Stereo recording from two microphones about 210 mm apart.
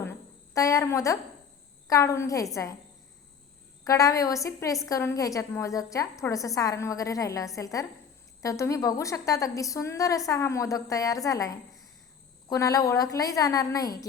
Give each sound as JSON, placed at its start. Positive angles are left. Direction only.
{"t": 0.0, "sound": "music", "side_deg": 15}
{"t": 1.9, "sound": "a woman's voice", "side_deg": 15}
{"t": 3.8, "sound": "a woman's voice", "side_deg": 15}